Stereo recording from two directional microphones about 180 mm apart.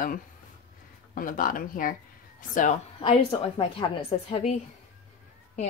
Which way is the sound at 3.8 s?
30° left (ahead or behind).